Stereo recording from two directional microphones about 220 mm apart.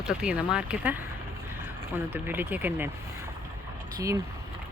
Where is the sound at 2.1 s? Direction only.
10° right (ahead or behind).